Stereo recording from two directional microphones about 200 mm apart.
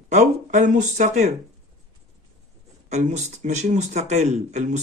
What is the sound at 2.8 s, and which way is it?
Speech, 35° right (ahead or behind).